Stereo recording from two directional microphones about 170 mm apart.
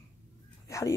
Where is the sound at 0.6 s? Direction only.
20° left (ahead or behind).